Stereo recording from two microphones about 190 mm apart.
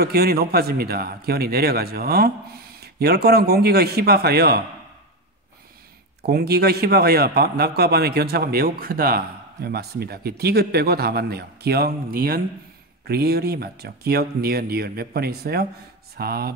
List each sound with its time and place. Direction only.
0.0 s a man's voice: 55° right (ahead or behind)
6.2 s a man's voice: 55° right (ahead or behind)